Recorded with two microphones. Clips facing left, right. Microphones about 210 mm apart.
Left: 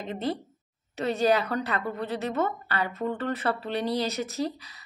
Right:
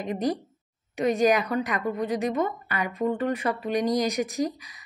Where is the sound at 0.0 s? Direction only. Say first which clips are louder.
Right 4 dB; 15° right (ahead or behind).